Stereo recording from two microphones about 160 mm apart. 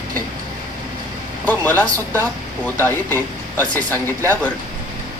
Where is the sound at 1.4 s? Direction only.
10° left (ahead or behind).